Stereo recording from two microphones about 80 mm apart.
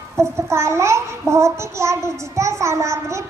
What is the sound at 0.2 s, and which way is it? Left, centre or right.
A child's voice, right.